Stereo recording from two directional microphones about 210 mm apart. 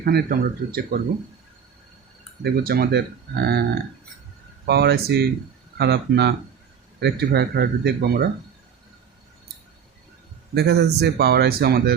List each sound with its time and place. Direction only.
0.0 s speech: 45° right (ahead or behind)
2.4 s speech: 45° right (ahead or behind)
4.6 s speech: 50° right (ahead or behind)
10.5 s speech: 50° right (ahead or behind)